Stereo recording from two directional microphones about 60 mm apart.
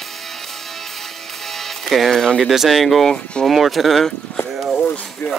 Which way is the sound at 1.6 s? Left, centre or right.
Centre.